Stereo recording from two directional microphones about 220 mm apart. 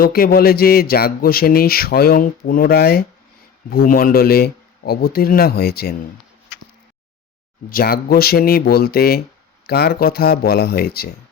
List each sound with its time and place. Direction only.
0.0 s speech: 40° left (ahead or behind)
7.7 s speech: 45° left (ahead or behind)